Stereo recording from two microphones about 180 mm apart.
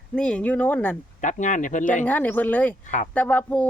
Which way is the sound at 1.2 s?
45° left (ahead or behind).